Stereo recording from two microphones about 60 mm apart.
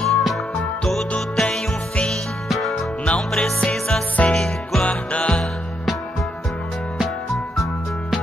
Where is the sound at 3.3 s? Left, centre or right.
Centre.